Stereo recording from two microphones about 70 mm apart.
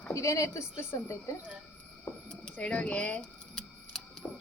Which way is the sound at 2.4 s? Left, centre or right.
Centre.